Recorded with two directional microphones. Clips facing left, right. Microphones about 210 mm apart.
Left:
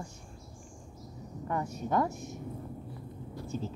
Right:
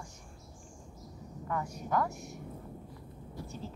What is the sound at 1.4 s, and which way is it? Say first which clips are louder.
Speech: left 3 dB; 25° left (ahead or behind).